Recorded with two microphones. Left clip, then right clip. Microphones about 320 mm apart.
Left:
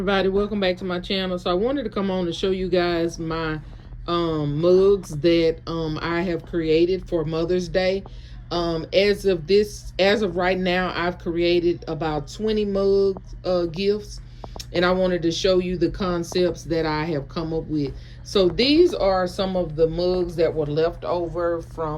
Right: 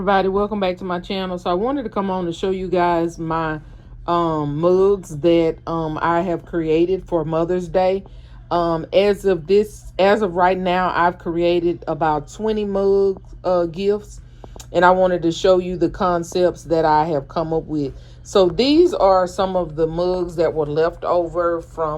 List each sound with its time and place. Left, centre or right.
0.0 s speech: centre
13.4 s speech: centre